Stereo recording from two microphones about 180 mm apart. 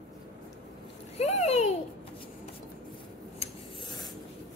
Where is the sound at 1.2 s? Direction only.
35° left (ahead or behind).